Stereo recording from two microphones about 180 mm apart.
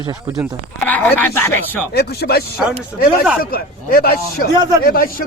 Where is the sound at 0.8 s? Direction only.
10° left (ahead or behind).